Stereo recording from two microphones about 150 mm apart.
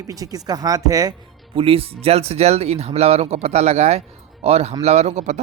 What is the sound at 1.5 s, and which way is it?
Speech, 40° right (ahead or behind).